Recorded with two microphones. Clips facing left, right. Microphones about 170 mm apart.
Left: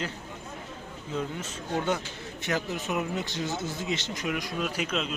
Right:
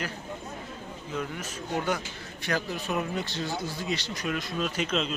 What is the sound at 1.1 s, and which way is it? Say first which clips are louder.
Speech: left 2 dB; 25° left (ahead or behind).